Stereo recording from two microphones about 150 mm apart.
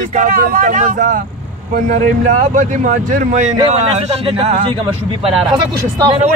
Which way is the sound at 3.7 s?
45° right (ahead or behind).